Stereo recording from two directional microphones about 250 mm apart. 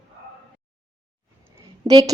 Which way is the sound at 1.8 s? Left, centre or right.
Centre.